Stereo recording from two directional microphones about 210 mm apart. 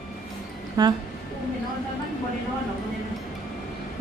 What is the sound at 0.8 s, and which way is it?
Speech, 20° right (ahead or behind).